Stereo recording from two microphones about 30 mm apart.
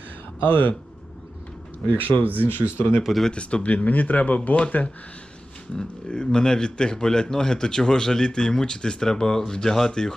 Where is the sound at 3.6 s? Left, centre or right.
Left.